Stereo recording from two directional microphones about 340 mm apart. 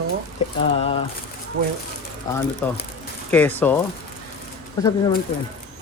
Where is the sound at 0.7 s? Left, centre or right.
Centre.